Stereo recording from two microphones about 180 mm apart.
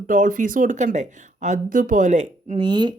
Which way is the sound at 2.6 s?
25° right (ahead or behind).